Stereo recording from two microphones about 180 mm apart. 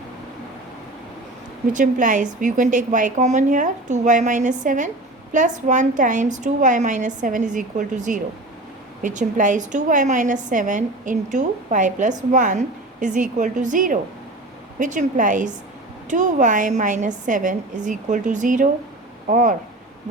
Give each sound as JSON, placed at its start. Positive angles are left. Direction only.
{"t": 1.7, "sound": "a woman's voice", "side_deg": -45}